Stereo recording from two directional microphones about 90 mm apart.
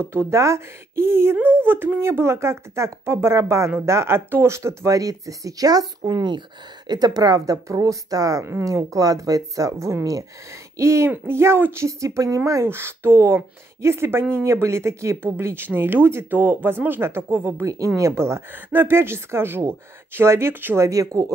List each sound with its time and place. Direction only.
0.0 s speech: 30° right (ahead or behind)